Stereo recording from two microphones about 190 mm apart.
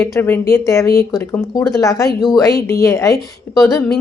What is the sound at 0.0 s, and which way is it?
A woman's voice, 15° left (ahead or behind).